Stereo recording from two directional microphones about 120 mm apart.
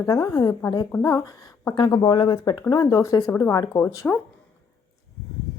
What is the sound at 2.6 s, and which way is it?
A woman's voice, 30° left (ahead or behind).